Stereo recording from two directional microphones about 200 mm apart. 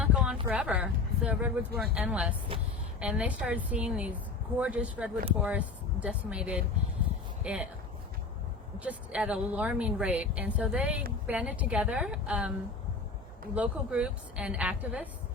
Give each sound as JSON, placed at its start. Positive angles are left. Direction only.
{"t": 0.0, "sound": "a sound", "side_deg": -5}
{"t": 0.4, "sound": "speech", "side_deg": -5}
{"t": 2.5, "sound": "a woman's voice", "side_deg": -25}
{"t": 3.0, "sound": "a woman's voice", "side_deg": -5}
{"t": 8.8, "sound": "a woman's voice", "side_deg": -5}
{"t": 13.6, "sound": "a woman's voice", "side_deg": -5}